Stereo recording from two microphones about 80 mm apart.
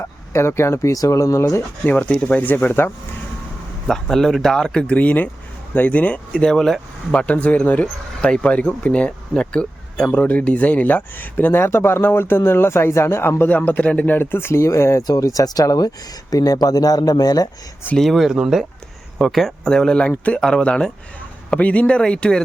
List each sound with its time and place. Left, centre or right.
0.0 s speech: left
1.9 s speech: centre
3.8 s speech: centre; by 15.0 s left
15.0 s speech: left
17.9 s speech: centre